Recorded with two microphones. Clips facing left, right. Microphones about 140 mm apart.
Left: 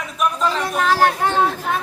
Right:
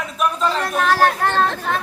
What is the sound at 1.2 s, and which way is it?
Chatter, 15° left (ahead or behind).